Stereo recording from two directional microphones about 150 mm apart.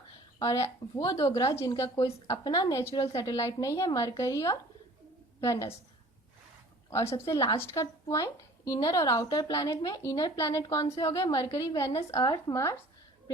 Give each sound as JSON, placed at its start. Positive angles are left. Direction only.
{"t": 0.3, "sound": "speech", "side_deg": 20}
{"t": 1.1, "sound": "a woman's voice", "side_deg": 40}
{"t": 1.4, "sound": "a woman's voice", "side_deg": 20}
{"t": 6.9, "sound": "speech", "side_deg": 20}